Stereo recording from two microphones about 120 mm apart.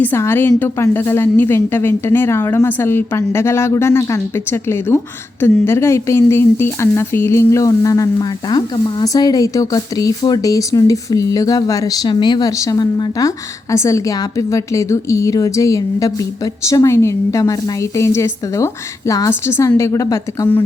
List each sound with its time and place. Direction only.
0.0 s speech: 20° left (ahead or behind)